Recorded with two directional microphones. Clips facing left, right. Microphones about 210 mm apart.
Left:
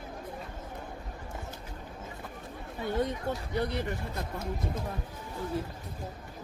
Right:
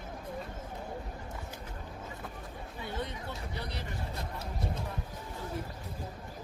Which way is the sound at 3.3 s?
50° left (ahead or behind).